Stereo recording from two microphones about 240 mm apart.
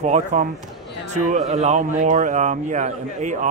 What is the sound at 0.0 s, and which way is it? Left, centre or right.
A man's voice, right.